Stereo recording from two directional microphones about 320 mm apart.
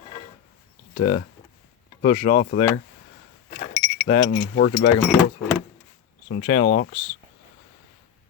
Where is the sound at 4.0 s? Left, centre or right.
Left.